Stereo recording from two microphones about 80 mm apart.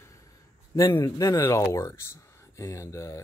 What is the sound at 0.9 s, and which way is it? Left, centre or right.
Speech, left.